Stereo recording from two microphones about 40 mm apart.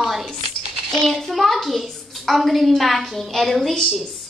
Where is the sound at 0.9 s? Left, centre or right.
Centre.